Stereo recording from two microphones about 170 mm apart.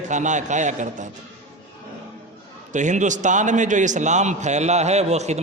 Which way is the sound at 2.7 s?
45° right (ahead or behind).